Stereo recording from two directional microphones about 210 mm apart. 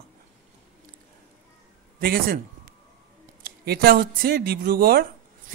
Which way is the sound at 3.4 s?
45° right (ahead or behind).